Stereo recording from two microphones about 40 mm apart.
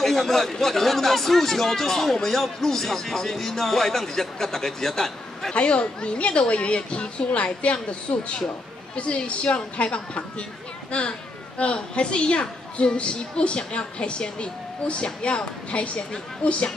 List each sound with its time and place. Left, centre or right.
0.0 s a man's voice: centre
5.5 s a woman's voice: left